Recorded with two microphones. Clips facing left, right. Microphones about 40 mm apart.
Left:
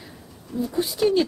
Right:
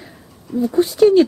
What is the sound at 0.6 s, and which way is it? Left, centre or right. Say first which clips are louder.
Speech: right 9 dB; centre.